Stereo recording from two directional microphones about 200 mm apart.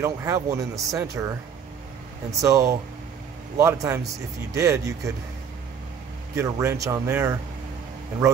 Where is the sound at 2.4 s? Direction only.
15° right (ahead or behind).